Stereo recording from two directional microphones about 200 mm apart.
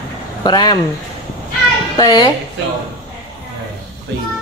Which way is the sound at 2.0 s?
20° left (ahead or behind).